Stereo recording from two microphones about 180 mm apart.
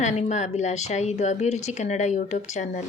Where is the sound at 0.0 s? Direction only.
40° left (ahead or behind).